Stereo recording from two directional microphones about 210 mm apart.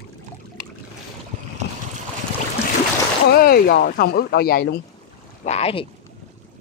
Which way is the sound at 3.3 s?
45° left (ahead or behind).